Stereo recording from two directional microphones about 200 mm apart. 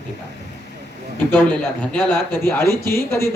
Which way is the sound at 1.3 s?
5° left (ahead or behind).